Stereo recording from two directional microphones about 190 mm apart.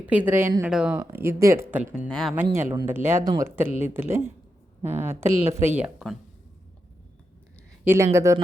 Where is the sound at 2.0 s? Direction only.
5° left (ahead or behind).